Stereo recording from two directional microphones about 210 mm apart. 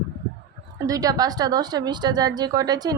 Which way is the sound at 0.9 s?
15° right (ahead or behind).